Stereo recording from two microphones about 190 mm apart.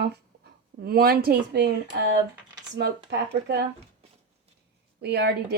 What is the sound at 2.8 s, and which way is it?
Speech, 60° right (ahead or behind).